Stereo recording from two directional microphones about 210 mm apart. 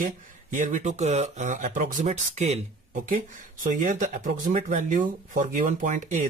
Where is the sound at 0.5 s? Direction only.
35° right (ahead or behind).